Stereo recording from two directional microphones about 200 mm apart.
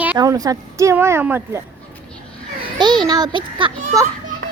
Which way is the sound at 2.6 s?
20° right (ahead or behind).